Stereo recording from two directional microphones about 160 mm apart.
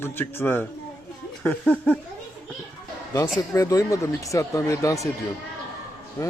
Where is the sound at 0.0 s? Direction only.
15° left (ahead or behind).